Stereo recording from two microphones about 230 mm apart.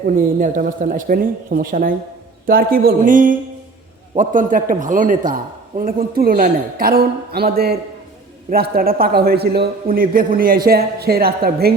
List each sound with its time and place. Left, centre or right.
0.2 s a man's voice: right